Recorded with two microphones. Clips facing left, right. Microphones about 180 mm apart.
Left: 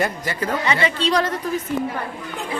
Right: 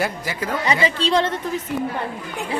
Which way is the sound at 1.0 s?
30° right (ahead or behind).